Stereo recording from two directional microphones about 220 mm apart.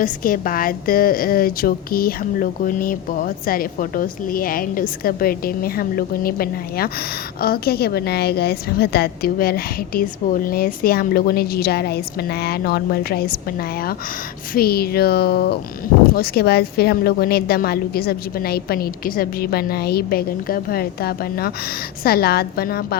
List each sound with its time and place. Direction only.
0.0 s a woman's voice: 40° left (ahead or behind)